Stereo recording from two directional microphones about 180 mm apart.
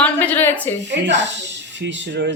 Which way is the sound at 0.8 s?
80° right.